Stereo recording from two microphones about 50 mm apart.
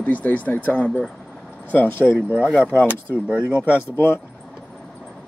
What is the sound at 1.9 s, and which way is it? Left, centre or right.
Speech, left.